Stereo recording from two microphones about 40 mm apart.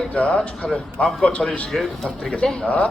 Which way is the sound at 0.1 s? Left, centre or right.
Left.